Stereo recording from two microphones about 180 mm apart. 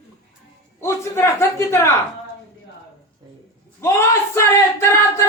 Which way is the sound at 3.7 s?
15° left (ahead or behind).